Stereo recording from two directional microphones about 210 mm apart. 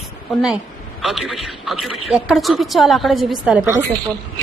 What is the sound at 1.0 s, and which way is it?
A woman's voice, centre (ahead or behind).